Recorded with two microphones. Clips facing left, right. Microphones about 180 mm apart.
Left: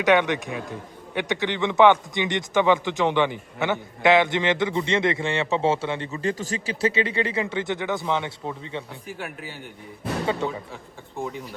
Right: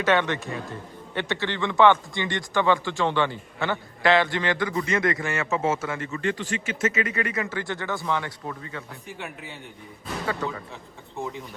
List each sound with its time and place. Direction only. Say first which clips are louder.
0.0 s a man's voice: left 3 dB; 15° left (ahead or behind)
6.2 s a man's voice: left 1 dB; 40° left (ahead or behind); by 8.8 s 20° left (ahead or behind)
10.2 s a man's voice: left 2 dB; 25° left (ahead or behind)
11.2 s speech: left 2 dB; centre (ahead or behind)